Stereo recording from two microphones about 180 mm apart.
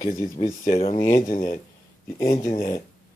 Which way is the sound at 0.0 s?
40° left (ahead or behind).